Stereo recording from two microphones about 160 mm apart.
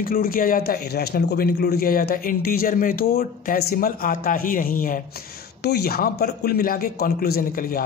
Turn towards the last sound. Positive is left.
turn(degrees=60)  # may be behind; listen again after turning